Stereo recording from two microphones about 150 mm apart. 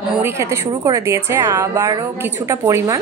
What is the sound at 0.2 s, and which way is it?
A woman's voice, 20° right (ahead or behind).